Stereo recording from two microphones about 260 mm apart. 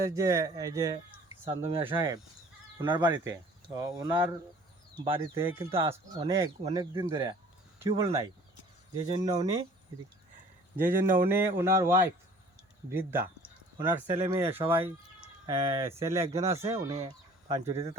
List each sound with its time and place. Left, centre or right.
0.0 s speech: centre
10.8 s speech: right
11.3 s speech: centre